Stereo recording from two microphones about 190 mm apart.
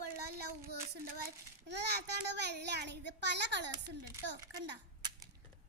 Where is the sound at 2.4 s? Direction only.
60° right (ahead or behind).